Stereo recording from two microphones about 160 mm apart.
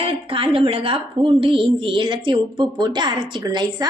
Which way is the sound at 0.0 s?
35° right (ahead or behind).